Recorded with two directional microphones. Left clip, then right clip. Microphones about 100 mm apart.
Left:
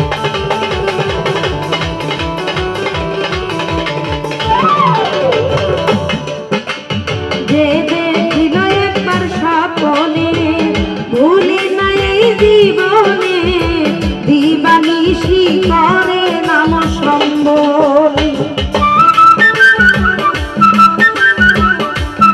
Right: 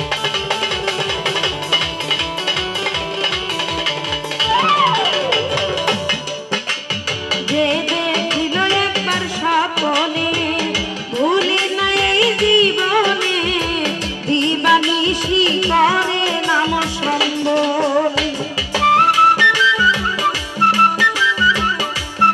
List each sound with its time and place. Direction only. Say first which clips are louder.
4.5 s music: left 4 dB; 15° right (ahead or behind)
7.5 s music: left 7 dB; 15° right (ahead or behind)